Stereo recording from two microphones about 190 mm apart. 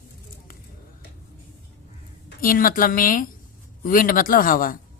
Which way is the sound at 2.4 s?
50° left (ahead or behind).